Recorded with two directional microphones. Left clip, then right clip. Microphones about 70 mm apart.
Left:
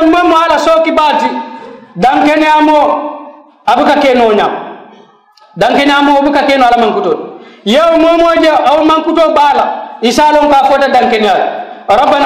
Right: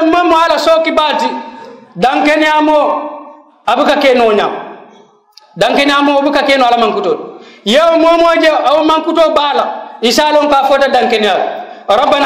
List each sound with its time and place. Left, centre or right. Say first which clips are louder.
0.0 s a sound: left 2 dB; right
2.0 s a man's voice: left 2 dB; centre
5.6 s a man's voice: left 2 dB; right